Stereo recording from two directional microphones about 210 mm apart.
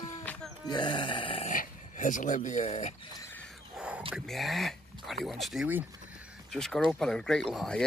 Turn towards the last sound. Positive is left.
turn(degrees=5)  # may be behind; listen again after turning